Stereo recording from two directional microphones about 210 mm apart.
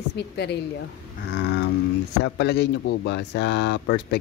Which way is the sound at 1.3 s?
55° left (ahead or behind).